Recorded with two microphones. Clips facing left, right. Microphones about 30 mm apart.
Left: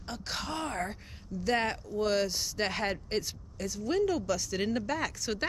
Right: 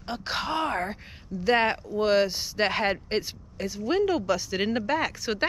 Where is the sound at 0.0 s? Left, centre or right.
Right.